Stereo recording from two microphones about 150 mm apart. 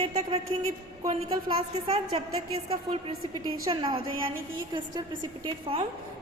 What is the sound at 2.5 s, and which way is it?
A woman's voice, 35° right (ahead or behind).